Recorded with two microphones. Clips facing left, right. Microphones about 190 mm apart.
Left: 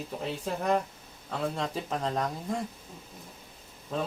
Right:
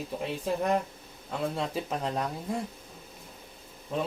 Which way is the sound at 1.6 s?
10° right (ahead or behind).